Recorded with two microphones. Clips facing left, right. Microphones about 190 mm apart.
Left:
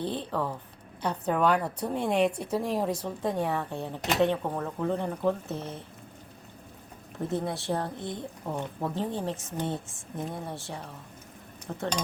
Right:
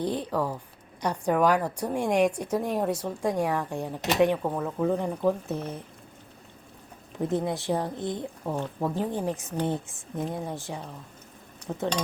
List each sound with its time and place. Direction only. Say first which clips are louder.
0.0 s speech: right 3 dB; 10° right (ahead or behind)
7.2 s speech: right 3 dB; 20° right (ahead or behind)